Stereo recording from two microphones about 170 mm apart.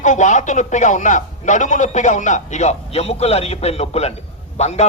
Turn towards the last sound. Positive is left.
turn(degrees=40)  # may be behind; listen again after turning